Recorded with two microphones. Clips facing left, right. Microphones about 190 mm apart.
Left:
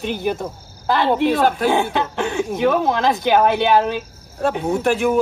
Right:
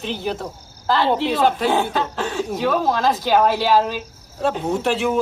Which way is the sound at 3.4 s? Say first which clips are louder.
Left 1 dB; 60° left (ahead or behind).